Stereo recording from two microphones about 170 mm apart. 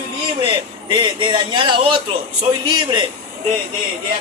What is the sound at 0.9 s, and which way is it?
Speech, 30° right (ahead or behind).